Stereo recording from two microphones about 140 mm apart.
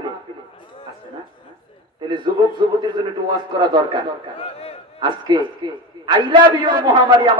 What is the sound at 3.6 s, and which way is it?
Speech, 35° right (ahead or behind).